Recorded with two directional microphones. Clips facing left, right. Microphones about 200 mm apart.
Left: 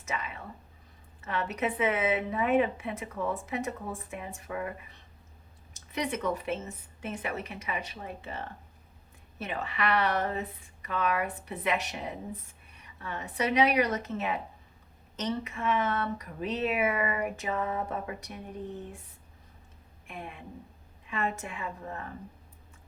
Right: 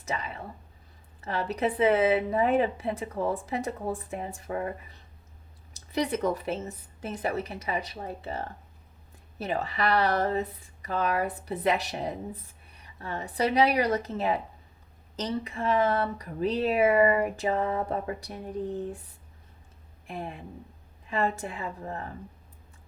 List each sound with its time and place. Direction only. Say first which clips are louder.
0.0 s a sound: right 3 dB; 35° right (ahead or behind)
1.2 s a woman's voice: right 3 dB; 35° right (ahead or behind)
5.9 s a woman's voice: right 4 dB; 35° right (ahead or behind)
9.4 s a woman's voice: right 4 dB; 35° right (ahead or behind)
20.1 s a woman's voice: right 5 dB; 35° right (ahead or behind)